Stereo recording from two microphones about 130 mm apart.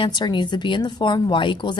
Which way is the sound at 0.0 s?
35° left (ahead or behind).